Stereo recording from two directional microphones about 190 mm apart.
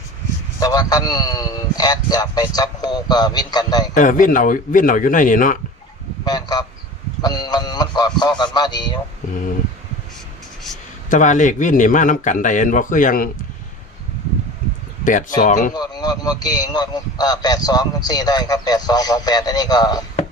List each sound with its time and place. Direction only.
0.6 s a man's voice: 20° left (ahead or behind)
3.9 s a man's voice: 45° left (ahead or behind)
6.2 s a man's voice: 20° left (ahead or behind)
11.1 s a man's voice: 40° left (ahead or behind)
15.4 s speech: 40° left (ahead or behind)
15.7 s a man's voice: 20° left (ahead or behind)